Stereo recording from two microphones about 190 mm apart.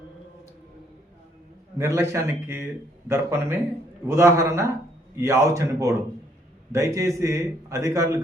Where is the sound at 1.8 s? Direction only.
15° right (ahead or behind).